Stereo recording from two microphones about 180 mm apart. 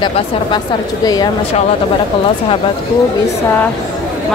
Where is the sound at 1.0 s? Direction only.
20° left (ahead or behind).